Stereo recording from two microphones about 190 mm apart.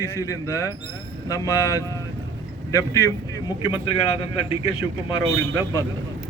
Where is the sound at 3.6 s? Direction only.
25° left (ahead or behind).